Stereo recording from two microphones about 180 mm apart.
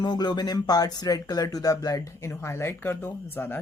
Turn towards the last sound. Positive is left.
turn(degrees=10)  # may be behind; listen again after turning